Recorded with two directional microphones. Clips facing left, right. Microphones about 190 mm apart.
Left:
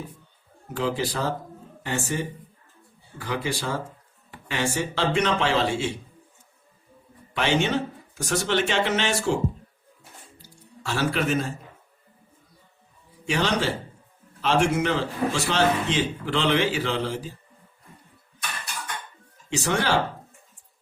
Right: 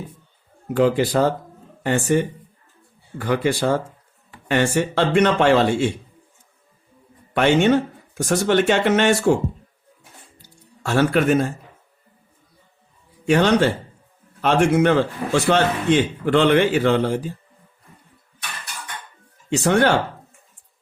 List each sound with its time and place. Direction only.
0.8 s a man's voice: 55° right (ahead or behind)
7.3 s a man's voice: 55° right (ahead or behind)
10.8 s a man's voice: 55° right (ahead or behind)
13.2 s a man's voice: 55° right (ahead or behind)
19.5 s a man's voice: 55° right (ahead or behind)